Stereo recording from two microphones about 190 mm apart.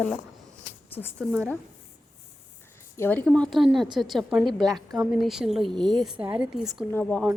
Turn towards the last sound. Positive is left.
turn(degrees=10)  # may be behind; listen again after turning